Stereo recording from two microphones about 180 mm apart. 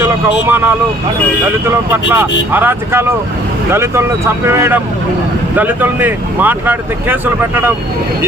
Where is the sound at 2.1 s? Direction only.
10° right (ahead or behind).